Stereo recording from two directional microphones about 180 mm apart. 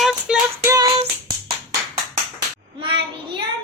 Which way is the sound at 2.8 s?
25° right (ahead or behind).